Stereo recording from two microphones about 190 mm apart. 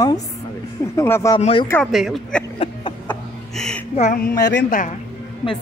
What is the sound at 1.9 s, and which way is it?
Speech, centre (ahead or behind).